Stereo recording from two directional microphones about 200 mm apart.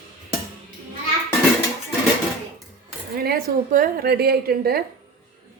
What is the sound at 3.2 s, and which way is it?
Speech, 50° right (ahead or behind).